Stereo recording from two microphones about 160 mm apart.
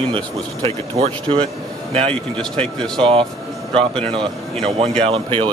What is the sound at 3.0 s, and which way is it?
Speech, 35° right (ahead or behind).